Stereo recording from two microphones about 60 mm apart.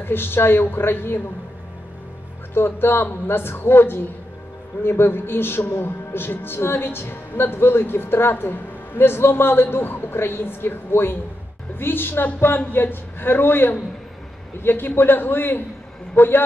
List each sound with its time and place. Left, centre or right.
0.0 s speech: left
2.5 s speech: left